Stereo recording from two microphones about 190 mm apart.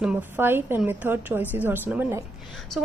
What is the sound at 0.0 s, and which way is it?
A woman's voice, 10° right (ahead or behind).